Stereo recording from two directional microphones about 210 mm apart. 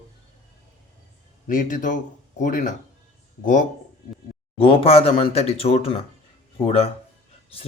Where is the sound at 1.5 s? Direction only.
40° left (ahead or behind).